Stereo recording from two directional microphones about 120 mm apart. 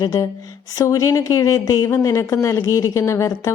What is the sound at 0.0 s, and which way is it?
Speech, 30° left (ahead or behind).